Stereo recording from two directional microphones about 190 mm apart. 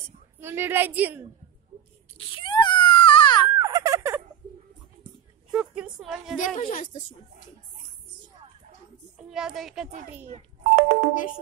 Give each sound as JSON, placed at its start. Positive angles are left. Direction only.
{"t": 0.0, "sound": "a woman's voice", "side_deg": -10}
{"t": 2.1, "sound": "wail", "side_deg": 25}
{"t": 3.5, "sound": "a sound", "side_deg": -15}
{"t": 5.5, "sound": "a woman's voice", "side_deg": -5}
{"t": 6.3, "sound": "a woman's voice", "side_deg": 45}
{"t": 9.2, "sound": "a woman's voice", "side_deg": -5}
{"t": 10.2, "sound": "telephone dialing", "side_deg": -35}